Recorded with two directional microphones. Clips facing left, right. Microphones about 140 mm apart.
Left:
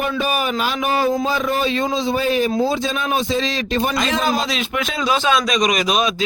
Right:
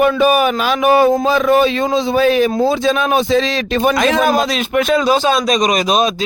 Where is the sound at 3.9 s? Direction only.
60° right (ahead or behind).